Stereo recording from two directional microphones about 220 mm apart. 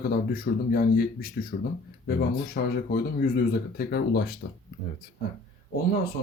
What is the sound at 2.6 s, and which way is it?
Speech, 45° left (ahead or behind).